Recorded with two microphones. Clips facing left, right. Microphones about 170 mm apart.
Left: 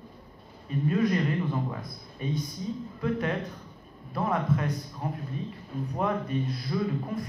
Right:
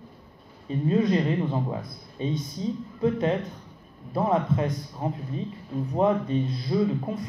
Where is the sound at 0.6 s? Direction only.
25° right (ahead or behind).